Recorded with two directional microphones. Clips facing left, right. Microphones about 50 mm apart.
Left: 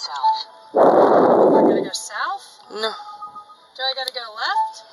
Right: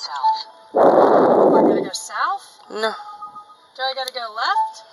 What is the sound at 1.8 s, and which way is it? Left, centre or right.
A woman's voice, right.